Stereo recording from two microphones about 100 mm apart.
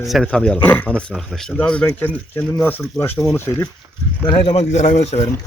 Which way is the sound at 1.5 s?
15° left (ahead or behind).